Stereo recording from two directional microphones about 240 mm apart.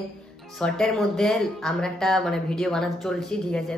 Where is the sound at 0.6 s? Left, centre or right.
Centre.